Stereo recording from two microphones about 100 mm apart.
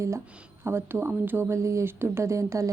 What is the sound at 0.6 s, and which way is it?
Speech, 25° right (ahead or behind).